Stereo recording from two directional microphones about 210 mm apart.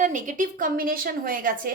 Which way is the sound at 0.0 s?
35° right (ahead or behind).